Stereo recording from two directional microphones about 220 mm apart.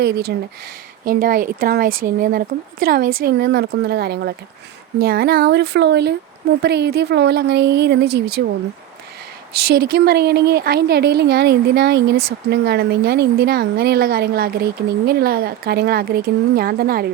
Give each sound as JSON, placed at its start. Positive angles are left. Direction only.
{"t": 0.0, "sound": "a woman's voice", "side_deg": -45}
{"t": 9.6, "sound": "a woman's voice", "side_deg": -45}